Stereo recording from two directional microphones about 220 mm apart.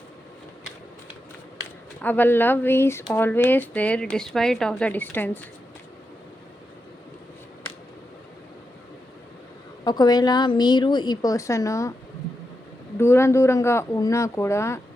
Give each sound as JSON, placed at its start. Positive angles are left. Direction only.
{"t": 2.0, "sound": "speech", "side_deg": 10}
{"t": 9.8, "sound": "a woman's voice", "side_deg": 20}
{"t": 13.0, "sound": "speech", "side_deg": 10}